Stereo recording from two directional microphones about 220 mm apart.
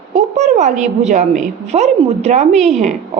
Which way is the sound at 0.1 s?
30° right (ahead or behind).